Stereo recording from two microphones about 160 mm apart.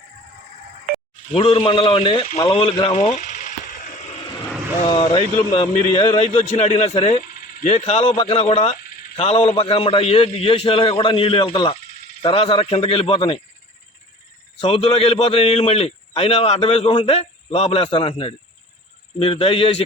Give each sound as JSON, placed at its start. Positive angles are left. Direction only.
{"t": 1.3, "sound": "speech", "side_deg": 35}
{"t": 2.9, "sound": "a sound", "side_deg": 45}
{"t": 4.9, "sound": "speech", "side_deg": 30}
{"t": 14.6, "sound": "speech", "side_deg": 35}